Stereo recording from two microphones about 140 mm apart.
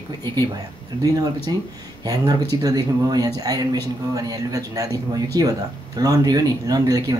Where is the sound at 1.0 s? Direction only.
25° right (ahead or behind).